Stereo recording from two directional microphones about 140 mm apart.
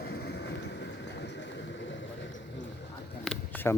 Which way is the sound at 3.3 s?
15° left (ahead or behind).